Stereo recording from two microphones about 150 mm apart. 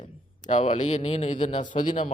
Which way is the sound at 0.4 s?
50° left (ahead or behind).